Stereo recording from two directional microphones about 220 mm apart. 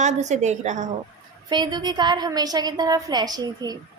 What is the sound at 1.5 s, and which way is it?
A woman's voice, 20° right (ahead or behind).